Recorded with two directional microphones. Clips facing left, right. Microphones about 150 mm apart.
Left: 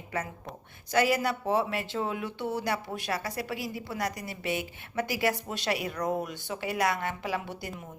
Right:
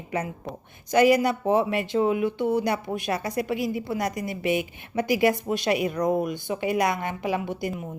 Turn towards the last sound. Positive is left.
turn(degrees=-15)  # may be behind; listen again after turning